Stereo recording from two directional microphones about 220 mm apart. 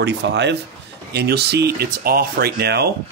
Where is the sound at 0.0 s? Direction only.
50° right (ahead or behind).